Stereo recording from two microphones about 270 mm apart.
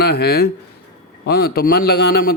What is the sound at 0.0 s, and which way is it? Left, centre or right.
A man's voice, left.